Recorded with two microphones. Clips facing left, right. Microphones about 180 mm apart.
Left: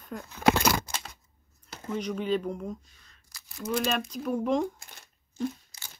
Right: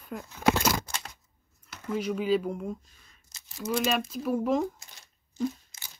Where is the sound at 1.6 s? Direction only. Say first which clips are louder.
Right 1 dB; 30° left (ahead or behind).